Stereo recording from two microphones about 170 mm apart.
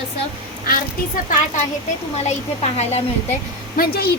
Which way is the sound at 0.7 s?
50° left (ahead or behind).